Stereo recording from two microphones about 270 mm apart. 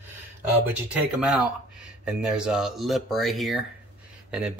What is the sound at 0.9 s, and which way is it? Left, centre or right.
Speech, centre.